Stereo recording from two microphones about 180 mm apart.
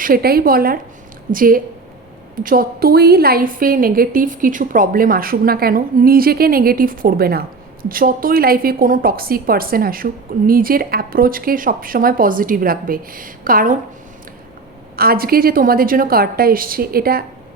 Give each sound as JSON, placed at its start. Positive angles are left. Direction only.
{"t": 0.0, "sound": "a woman's voice", "side_deg": -55}
{"t": 14.9, "sound": "a woman's voice", "side_deg": -55}